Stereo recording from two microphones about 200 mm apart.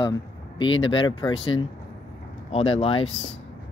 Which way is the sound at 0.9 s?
25° left (ahead or behind).